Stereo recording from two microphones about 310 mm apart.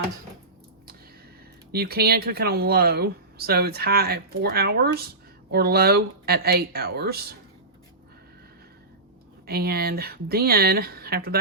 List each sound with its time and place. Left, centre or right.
1.7 s speech: right
9.5 s speech: right